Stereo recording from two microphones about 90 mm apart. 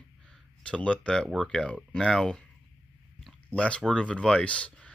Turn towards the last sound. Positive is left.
turn(degrees=10)  # may be behind; listen again after turning